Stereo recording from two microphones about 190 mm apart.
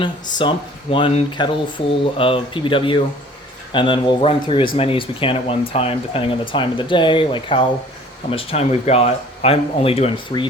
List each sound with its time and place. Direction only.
0.0 s speech: 25° left (ahead or behind)